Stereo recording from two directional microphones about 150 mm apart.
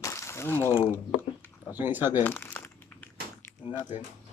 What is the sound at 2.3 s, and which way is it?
Crumpling, 15° left (ahead or behind).